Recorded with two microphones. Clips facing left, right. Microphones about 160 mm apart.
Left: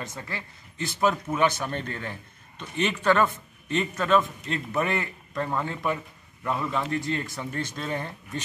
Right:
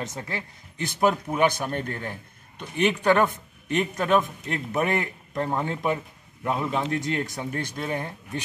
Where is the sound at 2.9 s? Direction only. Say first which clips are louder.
Right 1 dB; 15° right (ahead or behind).